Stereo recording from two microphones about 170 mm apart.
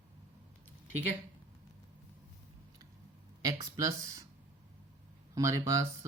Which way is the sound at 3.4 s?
20° right (ahead or behind).